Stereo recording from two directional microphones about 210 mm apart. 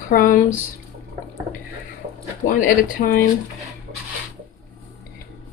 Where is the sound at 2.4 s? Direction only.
40° left (ahead or behind).